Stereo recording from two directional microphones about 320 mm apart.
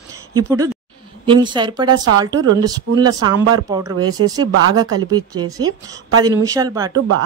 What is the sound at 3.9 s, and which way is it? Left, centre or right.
Speech, right.